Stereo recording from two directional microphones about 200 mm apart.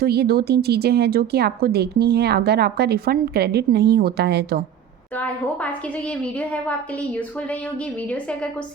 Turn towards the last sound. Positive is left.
turn(degrees=5)  # may be behind; listen again after turning